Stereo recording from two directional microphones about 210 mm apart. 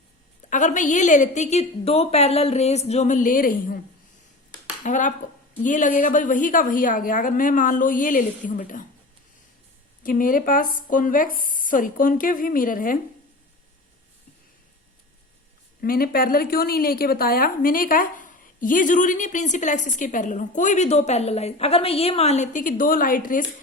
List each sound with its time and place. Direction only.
0.5 s a woman's voice: 35° left (ahead or behind)
4.8 s a woman's voice: 35° left (ahead or behind)
10.0 s a woman's voice: 40° left (ahead or behind)
15.8 s a woman's voice: 45° left (ahead or behind)